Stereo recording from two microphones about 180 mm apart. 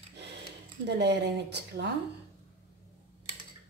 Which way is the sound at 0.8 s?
70° right (ahead or behind).